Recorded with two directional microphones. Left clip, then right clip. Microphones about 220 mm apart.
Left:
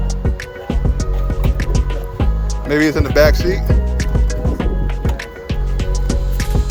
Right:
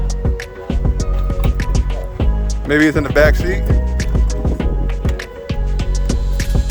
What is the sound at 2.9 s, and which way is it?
Speech, 20° right (ahead or behind).